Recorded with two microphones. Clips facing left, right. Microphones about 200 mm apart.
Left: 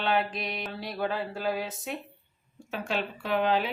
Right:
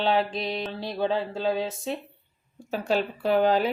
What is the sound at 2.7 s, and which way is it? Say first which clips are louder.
Speech: right 6 dB; 35° right (ahead or behind).